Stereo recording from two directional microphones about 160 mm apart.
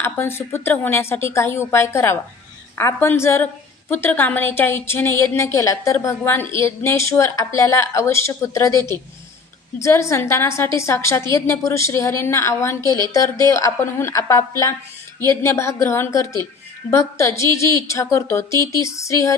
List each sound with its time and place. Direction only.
0.0 s a woman's voice: 15° left (ahead or behind)